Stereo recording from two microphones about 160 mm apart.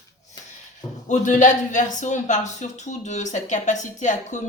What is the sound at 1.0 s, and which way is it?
Speech, 50° left (ahead or behind).